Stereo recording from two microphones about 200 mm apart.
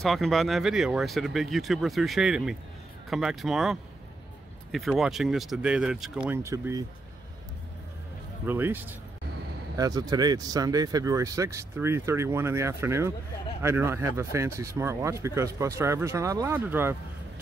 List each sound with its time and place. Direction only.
0.0 s speech: centre (ahead or behind)
4.7 s speech: centre (ahead or behind)
8.5 s speech: 10° right (ahead or behind)